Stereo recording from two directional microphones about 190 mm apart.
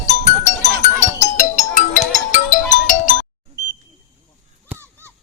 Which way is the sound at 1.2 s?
40° left (ahead or behind).